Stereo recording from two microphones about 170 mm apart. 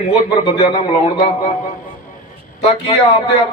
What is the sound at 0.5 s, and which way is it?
Speech, 30° left (ahead or behind).